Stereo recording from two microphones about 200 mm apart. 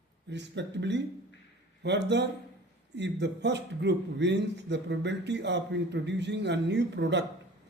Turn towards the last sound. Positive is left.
turn(degrees=-60)  # may be behind; listen again after turning